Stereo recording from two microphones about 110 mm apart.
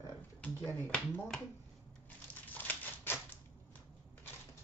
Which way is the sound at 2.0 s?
15° left (ahead or behind).